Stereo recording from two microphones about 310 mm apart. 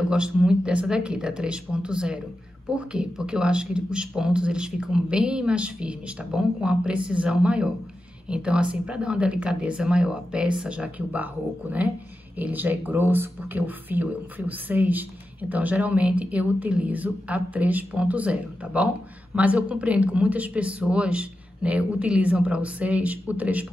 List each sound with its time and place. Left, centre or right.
0.1 s a man's voice: centre
12.4 s a man's voice: centre